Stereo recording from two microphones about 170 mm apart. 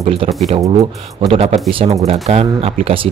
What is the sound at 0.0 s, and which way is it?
A man's voice, 35° right (ahead or behind).